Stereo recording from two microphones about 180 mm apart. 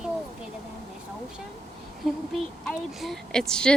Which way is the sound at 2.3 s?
Centre (ahead or behind).